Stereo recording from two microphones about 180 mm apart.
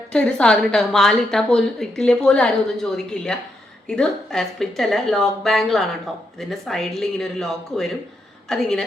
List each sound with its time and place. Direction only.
0.1 s a woman's voice: 5° left (ahead or behind)